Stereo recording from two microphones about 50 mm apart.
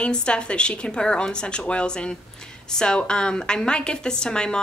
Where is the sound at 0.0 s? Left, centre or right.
Left.